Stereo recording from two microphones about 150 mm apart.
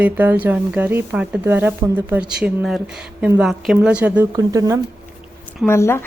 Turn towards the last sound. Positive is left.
turn(degrees=15)  # may be behind; listen again after turning